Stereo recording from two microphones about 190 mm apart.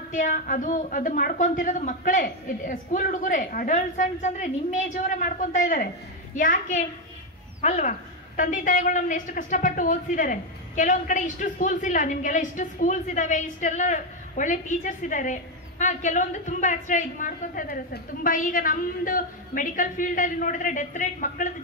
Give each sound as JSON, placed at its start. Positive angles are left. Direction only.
{"t": 0.1, "sound": "a woman's voice", "side_deg": 45}